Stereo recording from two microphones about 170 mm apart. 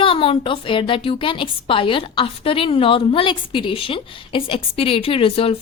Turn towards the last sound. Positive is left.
turn(degrees=35)  # may be behind; listen again after turning